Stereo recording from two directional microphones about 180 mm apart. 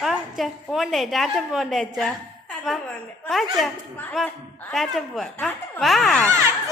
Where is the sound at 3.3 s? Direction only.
Centre (ahead or behind).